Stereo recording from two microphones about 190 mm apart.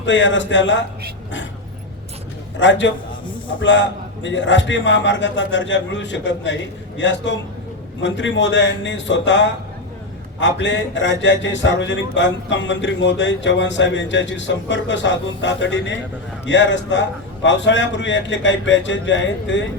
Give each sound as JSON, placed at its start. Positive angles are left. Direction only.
{"t": 0.0, "sound": "a man's voice", "side_deg": 75}
{"t": 2.6, "sound": "a man's voice", "side_deg": 70}